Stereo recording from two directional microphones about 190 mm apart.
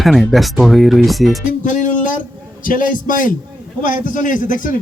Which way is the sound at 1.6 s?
40° left (ahead or behind).